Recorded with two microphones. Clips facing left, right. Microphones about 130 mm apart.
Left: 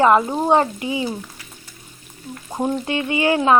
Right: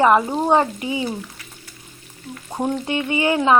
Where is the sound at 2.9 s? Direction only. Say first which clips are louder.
Left 1 dB; 25° right (ahead or behind).